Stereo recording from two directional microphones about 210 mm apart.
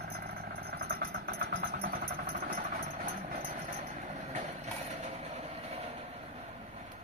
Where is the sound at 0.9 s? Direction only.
45° right (ahead or behind).